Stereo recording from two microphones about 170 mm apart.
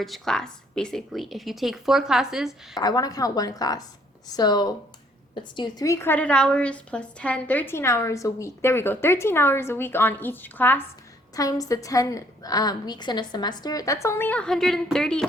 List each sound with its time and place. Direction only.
0.0 s speech: centre (ahead or behind)
2.7 s a woman's voice: 20° left (ahead or behind); by 15.3 s 5° left (ahead or behind)